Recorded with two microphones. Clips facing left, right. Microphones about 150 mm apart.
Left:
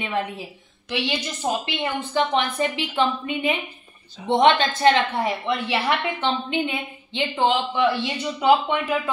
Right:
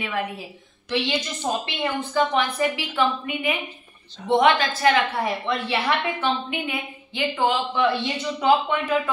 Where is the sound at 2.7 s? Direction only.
25° left (ahead or behind).